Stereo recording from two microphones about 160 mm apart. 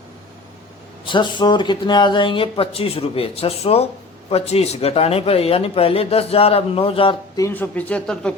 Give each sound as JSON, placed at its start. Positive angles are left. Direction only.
{"t": 1.0, "sound": "speech", "side_deg": 30}
{"t": 7.3, "sound": "speech", "side_deg": 15}